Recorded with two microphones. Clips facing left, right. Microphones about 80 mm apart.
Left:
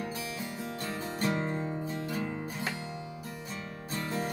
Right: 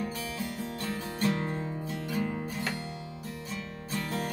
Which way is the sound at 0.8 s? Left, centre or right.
Centre.